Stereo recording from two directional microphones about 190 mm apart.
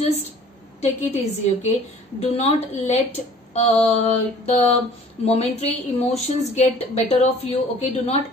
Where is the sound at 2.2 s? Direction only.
35° left (ahead or behind).